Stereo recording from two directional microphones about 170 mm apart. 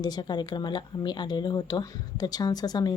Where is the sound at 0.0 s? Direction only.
25° left (ahead or behind).